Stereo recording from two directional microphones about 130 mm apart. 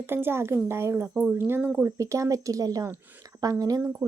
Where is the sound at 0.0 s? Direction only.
15° right (ahead or behind).